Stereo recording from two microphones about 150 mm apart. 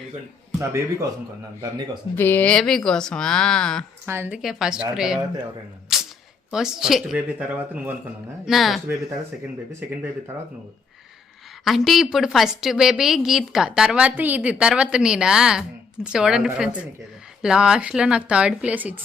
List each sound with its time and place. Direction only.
0.6 s a man's voice: 20° right (ahead or behind)
2.1 s a woman's voice: 10° left (ahead or behind)
4.0 s a woman's voice: 15° right (ahead or behind)
4.4 s a woman's voice: centre (ahead or behind)
6.5 s a woman's voice: 5° right (ahead or behind)
11.6 s a woman's voice: centre (ahead or behind)